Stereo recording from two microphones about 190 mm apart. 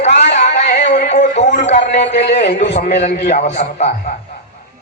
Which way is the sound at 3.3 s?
40° left (ahead or behind).